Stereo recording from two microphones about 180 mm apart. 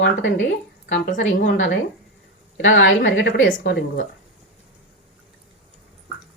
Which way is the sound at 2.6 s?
90° left.